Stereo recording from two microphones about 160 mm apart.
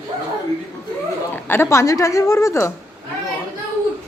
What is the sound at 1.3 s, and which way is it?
A woman's voice, 15° left (ahead or behind).